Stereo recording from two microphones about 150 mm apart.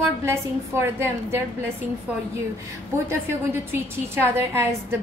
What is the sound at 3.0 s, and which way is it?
A woman's voice, 15° right (ahead or behind).